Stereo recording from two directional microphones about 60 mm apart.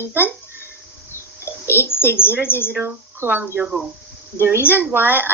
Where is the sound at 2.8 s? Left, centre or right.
Right.